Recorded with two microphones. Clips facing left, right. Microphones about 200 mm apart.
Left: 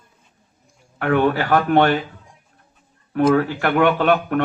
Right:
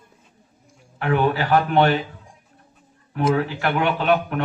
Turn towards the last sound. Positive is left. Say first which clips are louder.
# left 3 dB
turn(degrees=50)  # may be behind; listen again after turning